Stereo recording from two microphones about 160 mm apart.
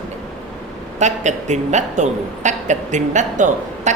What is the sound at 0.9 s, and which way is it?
A woman's voice, 45° right (ahead or behind).